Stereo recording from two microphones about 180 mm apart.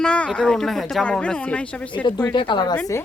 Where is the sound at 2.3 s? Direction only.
25° left (ahead or behind).